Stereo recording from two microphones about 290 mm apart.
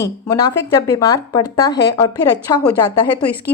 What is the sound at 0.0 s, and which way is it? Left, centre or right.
Speech, centre.